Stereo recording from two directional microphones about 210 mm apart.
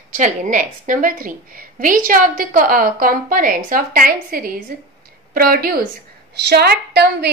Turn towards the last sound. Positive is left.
turn(degrees=-50)  # may be behind; listen again after turning